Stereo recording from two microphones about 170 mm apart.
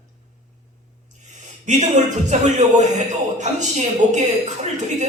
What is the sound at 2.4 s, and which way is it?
A woman's voice, 45° right (ahead or behind).